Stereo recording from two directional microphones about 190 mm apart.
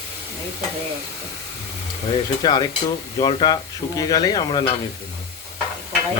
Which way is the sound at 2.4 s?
20° left (ahead or behind).